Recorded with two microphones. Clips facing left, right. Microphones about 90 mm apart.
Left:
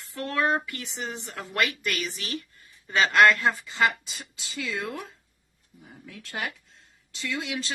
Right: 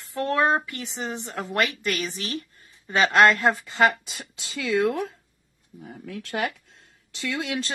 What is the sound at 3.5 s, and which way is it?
Speech, 50° right (ahead or behind).